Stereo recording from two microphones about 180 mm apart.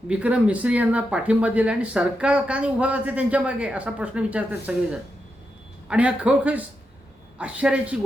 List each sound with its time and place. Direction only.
0.1 s speech: 5° right (ahead or behind)